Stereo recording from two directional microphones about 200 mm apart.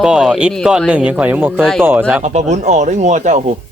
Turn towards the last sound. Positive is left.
turn(degrees=-35)  # may be behind; listen again after turning